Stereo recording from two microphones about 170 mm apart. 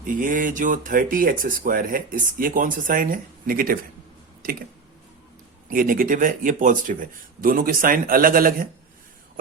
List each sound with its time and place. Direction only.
0.0 s speech: 55° right (ahead or behind)
5.6 s speech: 55° right (ahead or behind)